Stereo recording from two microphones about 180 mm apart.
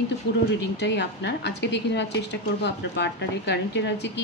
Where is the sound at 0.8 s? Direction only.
75° left (ahead or behind).